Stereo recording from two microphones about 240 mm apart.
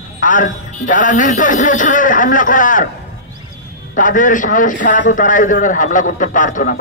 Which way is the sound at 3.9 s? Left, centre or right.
Left.